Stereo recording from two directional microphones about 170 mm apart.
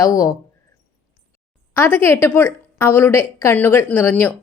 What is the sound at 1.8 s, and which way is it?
A woman's voice, 10° left (ahead or behind).